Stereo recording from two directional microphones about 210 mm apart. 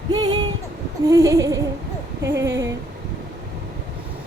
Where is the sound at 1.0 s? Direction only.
15° right (ahead or behind).